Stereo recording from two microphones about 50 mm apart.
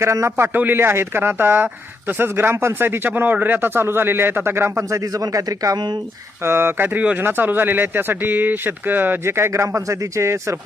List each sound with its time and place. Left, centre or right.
0.0 s a man's voice: right
0.3 s a man's voice: right
0.5 s speech: right
3.8 s speech: right
6.4 s speech: right
9.2 s a man's voice: right